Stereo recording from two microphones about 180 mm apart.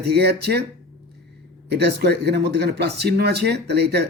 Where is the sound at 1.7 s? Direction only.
65° right (ahead or behind).